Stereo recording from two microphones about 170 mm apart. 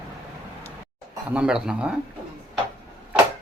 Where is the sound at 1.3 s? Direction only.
5° right (ahead or behind).